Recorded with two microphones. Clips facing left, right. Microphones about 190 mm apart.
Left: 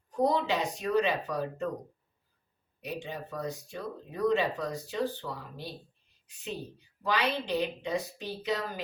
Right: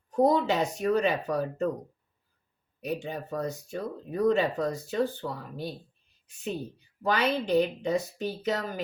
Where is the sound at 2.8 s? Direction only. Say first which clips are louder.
Right 5 dB; 45° right (ahead or behind).